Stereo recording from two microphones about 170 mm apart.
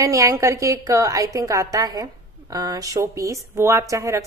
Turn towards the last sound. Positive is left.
turn(degrees=-20)  # may be behind; listen again after turning